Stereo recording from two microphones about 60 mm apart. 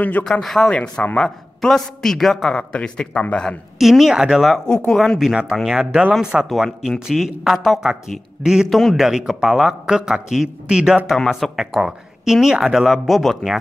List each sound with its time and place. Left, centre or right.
0.2 s a man's voice: centre
3.7 s speech: centre
4.6 s a man's voice: centre
5.2 s speech: centre
8.6 s speech: centre
8.9 s speech: centre